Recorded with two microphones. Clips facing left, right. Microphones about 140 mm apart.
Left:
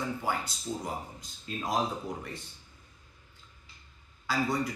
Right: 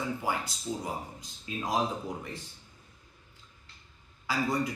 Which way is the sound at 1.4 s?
5° right (ahead or behind).